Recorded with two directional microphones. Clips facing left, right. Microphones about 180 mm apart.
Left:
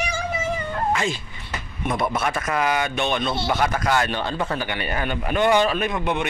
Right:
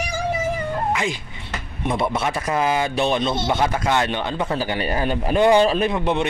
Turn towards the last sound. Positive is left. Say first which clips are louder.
# right 3 dB
turn(degrees=-30)  # may be behind; listen again after turning